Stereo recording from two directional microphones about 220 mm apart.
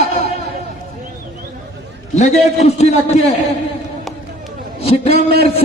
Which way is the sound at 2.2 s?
30° left (ahead or behind).